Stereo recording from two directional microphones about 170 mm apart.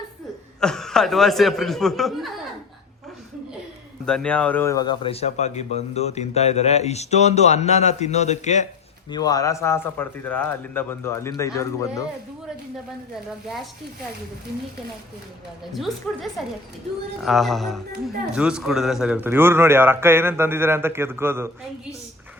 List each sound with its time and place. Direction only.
0.6 s speech: 5° left (ahead or behind)
4.0 s a man's voice: 5° left (ahead or behind); by 8.6 s 45° left (ahead or behind)
9.0 s a man's voice: 25° left (ahead or behind)
15.7 s a man's voice: centre (ahead or behind)